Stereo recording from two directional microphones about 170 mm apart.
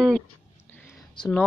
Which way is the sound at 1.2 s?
25° left (ahead or behind).